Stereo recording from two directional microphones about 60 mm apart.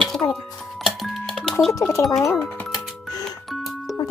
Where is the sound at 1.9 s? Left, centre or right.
Left.